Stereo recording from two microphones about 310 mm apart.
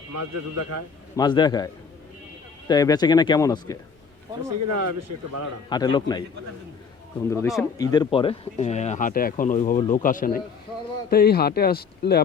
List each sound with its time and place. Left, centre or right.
0.1 s a man's voice: right
1.1 s speech: centre
4.5 s speech: right
5.6 s speech: centre
7.3 s speech: centre
7.8 s speech: centre; by 12.2 s left